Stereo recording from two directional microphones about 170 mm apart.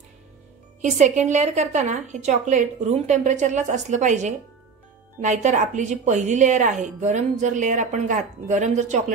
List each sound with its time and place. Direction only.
0.9 s a woman's voice: 45° right (ahead or behind)